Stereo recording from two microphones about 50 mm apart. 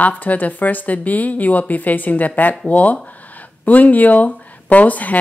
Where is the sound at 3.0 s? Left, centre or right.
Left.